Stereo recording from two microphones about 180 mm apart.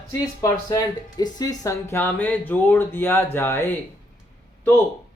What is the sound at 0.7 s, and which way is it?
Speech, 20° left (ahead or behind).